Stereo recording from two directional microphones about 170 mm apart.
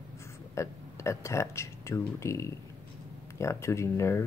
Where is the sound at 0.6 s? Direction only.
15° left (ahead or behind).